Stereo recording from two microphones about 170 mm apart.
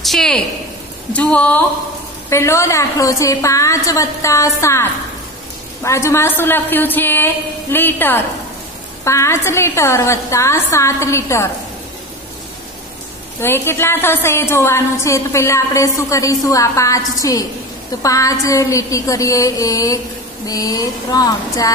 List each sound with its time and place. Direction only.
0.0 s a woman's voice: centre (ahead or behind)
5.9 s a woman's voice: 15° left (ahead or behind)
13.4 s a woman's voice: 15° left (ahead or behind)